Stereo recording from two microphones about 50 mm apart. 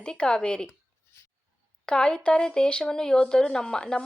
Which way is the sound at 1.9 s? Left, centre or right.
Centre.